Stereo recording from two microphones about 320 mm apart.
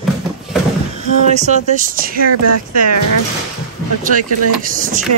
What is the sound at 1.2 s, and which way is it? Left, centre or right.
Speech, right.